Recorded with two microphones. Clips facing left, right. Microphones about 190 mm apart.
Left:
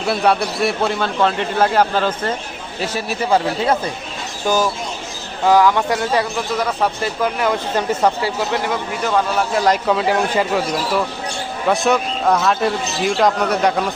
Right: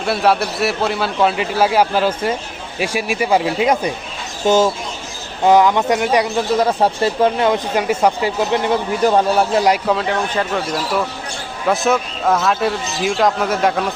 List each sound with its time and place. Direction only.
0.0 s a man's voice: centre (ahead or behind)
4.4 s speech: 25° right (ahead or behind)
6.3 s speech: 30° right (ahead or behind)
7.8 s a man's voice: 10° right (ahead or behind)
8.6 s a man's voice: 30° right (ahead or behind)
9.6 s a man's voice: 10° right (ahead or behind)
9.8 s speech: centre (ahead or behind)